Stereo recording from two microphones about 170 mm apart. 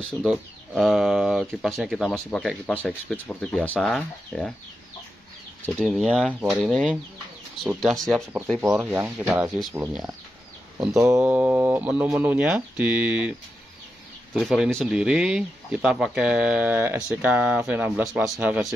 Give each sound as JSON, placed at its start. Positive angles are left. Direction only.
{"t": 0.2, "sound": "speech", "side_deg": 0}
{"t": 5.7, "sound": "speech", "side_deg": 0}
{"t": 8.7, "sound": "speech", "side_deg": -10}
{"t": 10.9, "sound": "speech", "side_deg": -15}